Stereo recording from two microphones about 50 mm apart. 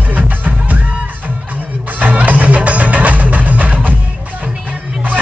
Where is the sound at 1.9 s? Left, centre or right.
Right.